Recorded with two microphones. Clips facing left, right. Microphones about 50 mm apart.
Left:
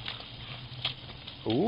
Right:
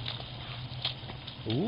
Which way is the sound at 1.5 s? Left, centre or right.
Centre.